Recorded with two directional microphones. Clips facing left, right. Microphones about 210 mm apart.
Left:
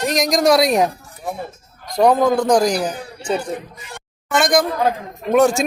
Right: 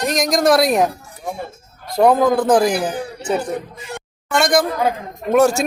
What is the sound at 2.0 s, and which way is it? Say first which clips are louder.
Speech: right 1 dB; 5° right (ahead or behind).